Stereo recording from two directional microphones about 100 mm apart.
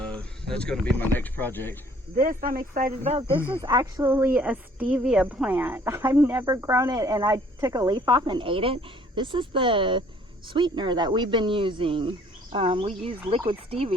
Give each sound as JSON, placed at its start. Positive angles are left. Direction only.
{"t": 0.0, "sound": "a sound", "side_deg": 10}
{"t": 0.9, "sound": "speech", "side_deg": 20}
{"t": 3.0, "sound": "speech", "side_deg": -85}
{"t": 3.6, "sound": "speech", "side_deg": -45}
{"t": 4.0, "sound": "a woman's voice", "side_deg": -25}
{"t": 7.9, "sound": "speech", "side_deg": -55}